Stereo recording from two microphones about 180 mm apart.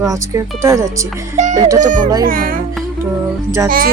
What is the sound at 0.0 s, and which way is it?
Speech, 15° right (ahead or behind).